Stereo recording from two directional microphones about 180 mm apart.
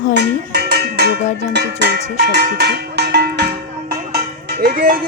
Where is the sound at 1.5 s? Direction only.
65° right (ahead or behind).